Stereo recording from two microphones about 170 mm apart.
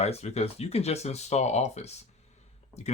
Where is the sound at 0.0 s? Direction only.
40° left (ahead or behind).